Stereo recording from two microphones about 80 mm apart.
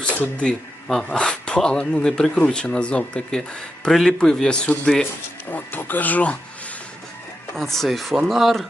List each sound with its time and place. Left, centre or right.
0.0 s speech: centre
5.5 s speech: left
7.5 s speech: centre